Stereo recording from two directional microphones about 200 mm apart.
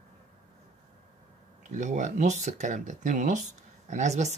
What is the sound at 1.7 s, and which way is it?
Speech, 35° right (ahead or behind).